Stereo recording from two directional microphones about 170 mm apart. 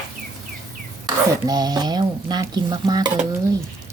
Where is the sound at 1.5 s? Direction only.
25° right (ahead or behind).